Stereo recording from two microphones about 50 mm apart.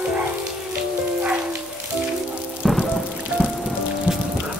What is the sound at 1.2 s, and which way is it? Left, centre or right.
Music, right.